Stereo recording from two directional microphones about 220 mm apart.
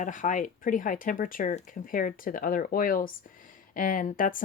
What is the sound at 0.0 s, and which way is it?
Speech, 35° left (ahead or behind).